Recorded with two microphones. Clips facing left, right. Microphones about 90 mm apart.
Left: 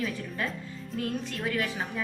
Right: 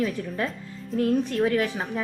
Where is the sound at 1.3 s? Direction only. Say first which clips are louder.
Right 8 dB; 35° right (ahead or behind).